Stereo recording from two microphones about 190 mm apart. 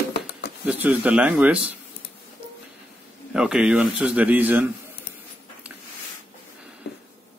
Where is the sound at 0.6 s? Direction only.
10° right (ahead or behind).